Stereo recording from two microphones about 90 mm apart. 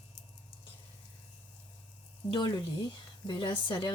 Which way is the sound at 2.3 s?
50° left (ahead or behind).